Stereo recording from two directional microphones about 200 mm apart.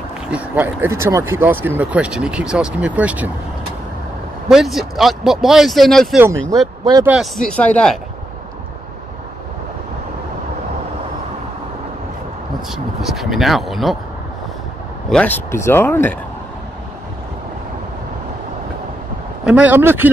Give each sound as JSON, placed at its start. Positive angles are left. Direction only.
{"t": 0.3, "sound": "speech", "side_deg": -10}
{"t": 4.5, "sound": "speech", "side_deg": 0}
{"t": 6.8, "sound": "speech", "side_deg": -20}
{"t": 7.1, "sound": "speech", "side_deg": 0}
{"t": 12.7, "sound": "speech", "side_deg": 0}
{"t": 15.0, "sound": "speech", "side_deg": 5}
{"t": 19.4, "sound": "speech", "side_deg": -5}